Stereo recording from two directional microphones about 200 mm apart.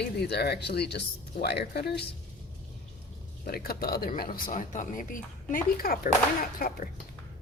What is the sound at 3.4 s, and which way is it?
Speech, 50° left (ahead or behind).